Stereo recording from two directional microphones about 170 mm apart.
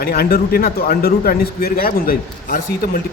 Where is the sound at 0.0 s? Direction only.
65° left (ahead or behind).